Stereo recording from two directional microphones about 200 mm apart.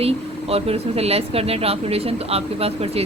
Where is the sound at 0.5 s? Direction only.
30° right (ahead or behind).